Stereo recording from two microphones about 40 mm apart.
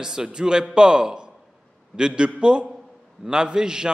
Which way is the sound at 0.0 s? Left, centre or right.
Centre.